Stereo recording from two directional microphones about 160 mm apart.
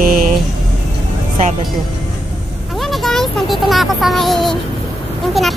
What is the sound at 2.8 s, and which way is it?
A child's voice, centre (ahead or behind).